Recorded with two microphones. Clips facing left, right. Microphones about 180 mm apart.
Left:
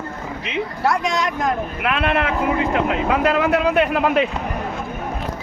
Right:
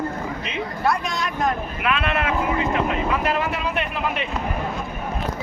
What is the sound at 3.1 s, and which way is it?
Speech, 75° left (ahead or behind).